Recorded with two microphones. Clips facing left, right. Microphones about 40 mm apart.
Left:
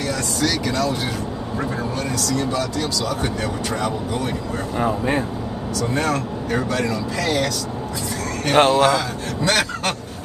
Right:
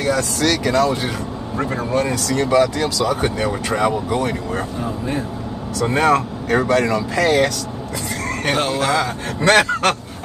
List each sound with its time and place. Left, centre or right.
0.7 s speech: right
4.1 s speech: right
4.7 s speech: left
5.8 s speech: right
8.5 s speech: left
8.9 s speech: right